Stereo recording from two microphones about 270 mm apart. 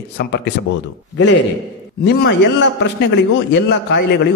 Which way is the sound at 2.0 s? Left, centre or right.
Left.